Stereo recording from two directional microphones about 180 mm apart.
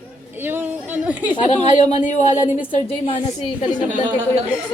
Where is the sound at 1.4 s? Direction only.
40° left (ahead or behind).